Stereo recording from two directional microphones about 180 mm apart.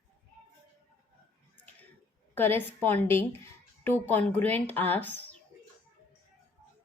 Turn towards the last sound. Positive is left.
turn(degrees=10)  # may be behind; listen again after turning